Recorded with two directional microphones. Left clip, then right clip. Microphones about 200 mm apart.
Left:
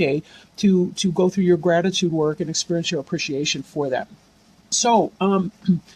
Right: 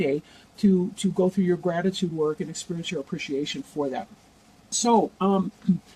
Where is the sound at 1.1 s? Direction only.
50° left (ahead or behind).